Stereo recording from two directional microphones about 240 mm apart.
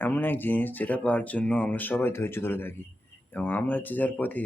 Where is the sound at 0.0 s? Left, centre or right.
Centre.